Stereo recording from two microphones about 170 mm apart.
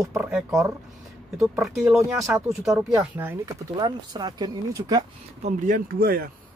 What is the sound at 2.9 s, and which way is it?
Speech, 15° right (ahead or behind).